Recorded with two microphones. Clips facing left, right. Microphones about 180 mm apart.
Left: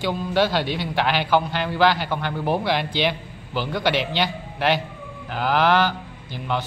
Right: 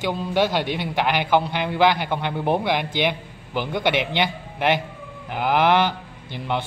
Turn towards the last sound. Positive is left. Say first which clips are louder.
# even
turn(degrees=-20)  # may be behind; listen again after turning